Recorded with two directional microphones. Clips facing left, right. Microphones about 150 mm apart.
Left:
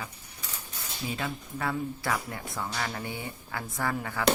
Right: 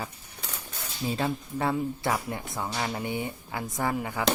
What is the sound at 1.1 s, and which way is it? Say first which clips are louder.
Speech: right 6 dB; 30° right (ahead or behind).